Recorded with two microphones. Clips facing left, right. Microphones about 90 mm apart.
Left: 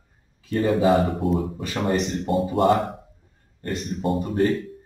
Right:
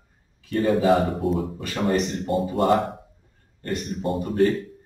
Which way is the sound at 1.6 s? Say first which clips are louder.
Even; 25° left (ahead or behind).